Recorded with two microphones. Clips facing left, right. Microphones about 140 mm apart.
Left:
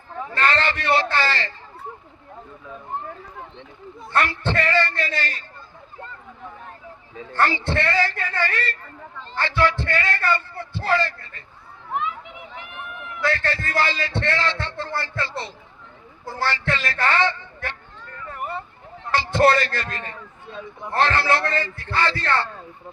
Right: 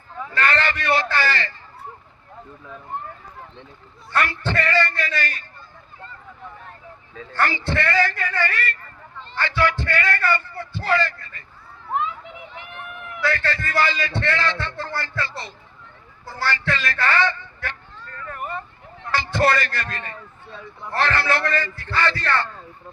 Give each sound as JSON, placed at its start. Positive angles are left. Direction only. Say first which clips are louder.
{"t": 0.3, "sound": "a sound", "louder": "even", "side_deg": 25}
{"t": 4.1, "sound": "a man's voice", "louder": "left 1 dB", "side_deg": 30}
{"t": 7.2, "sound": "a man's voice", "louder": "left 2 dB", "side_deg": 25}
{"t": 13.3, "sound": "a man's voice", "louder": "even", "side_deg": 25}
{"t": 16.2, "sound": "a sound", "louder": "even", "side_deg": 25}
{"t": 19.1, "sound": "a man's voice", "louder": "left 3 dB", "side_deg": 25}